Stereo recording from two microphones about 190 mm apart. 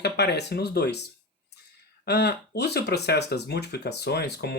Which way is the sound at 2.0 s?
60° left (ahead or behind).